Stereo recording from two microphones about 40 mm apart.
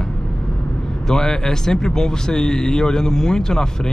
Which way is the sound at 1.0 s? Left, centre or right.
Centre.